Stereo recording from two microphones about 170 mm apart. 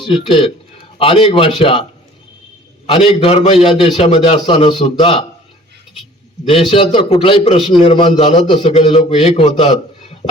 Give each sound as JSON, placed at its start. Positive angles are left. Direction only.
{"t": 0.0, "sound": "a man's voice", "side_deg": 30}
{"t": 2.8, "sound": "a man's voice", "side_deg": 30}
{"t": 6.5, "sound": "a man's voice", "side_deg": 35}